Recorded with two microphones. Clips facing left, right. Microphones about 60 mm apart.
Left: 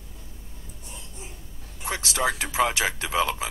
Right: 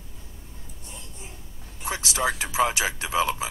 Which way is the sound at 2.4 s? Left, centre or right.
Left.